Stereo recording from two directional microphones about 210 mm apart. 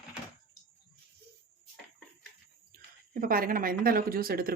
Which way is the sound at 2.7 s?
45° right (ahead or behind).